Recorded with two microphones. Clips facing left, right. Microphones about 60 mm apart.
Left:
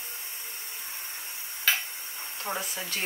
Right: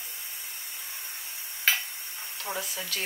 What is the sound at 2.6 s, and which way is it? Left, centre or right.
Speech, left.